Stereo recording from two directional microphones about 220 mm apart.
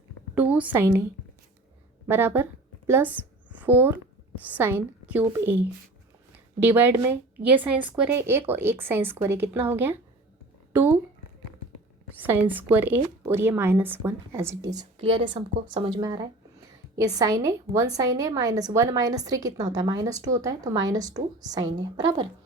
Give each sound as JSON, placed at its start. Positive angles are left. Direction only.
{"t": 0.3, "sound": "a woman's voice", "side_deg": -5}
{"t": 2.0, "sound": "a woman's voice", "side_deg": -10}
{"t": 6.6, "sound": "a woman's voice", "side_deg": -10}
{"t": 12.1, "sound": "a woman's voice", "side_deg": -10}
{"t": 14.8, "sound": "a woman's voice", "side_deg": -25}